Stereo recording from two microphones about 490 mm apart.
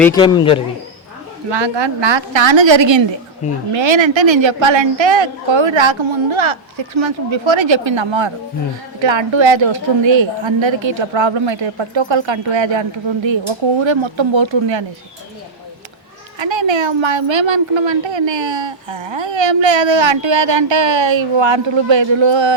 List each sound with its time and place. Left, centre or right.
0.0 s speech: centre
1.5 s a woman's voice: right
16.4 s a woman's voice: right